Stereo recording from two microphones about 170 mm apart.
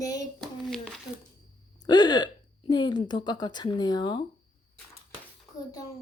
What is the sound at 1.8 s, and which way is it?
Speech, 25° left (ahead or behind).